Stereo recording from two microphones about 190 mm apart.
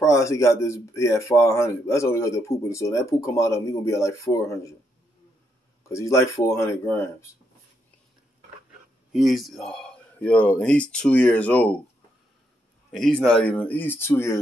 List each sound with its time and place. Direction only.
0.0 s speech: 15° left (ahead or behind)
5.9 s speech: 15° left (ahead or behind)
9.1 s speech: centre (ahead or behind)
12.9 s speech: 5° left (ahead or behind)